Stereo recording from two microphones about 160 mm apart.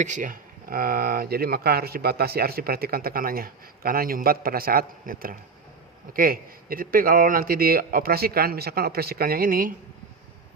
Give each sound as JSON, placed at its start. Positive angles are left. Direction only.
{"t": 0.0, "sound": "speech", "side_deg": -50}